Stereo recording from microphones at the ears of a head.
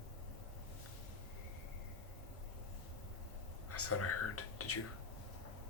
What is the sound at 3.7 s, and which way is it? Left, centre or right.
Speech, left.